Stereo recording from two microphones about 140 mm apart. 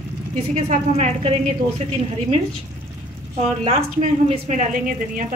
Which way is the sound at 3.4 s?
45° right (ahead or behind).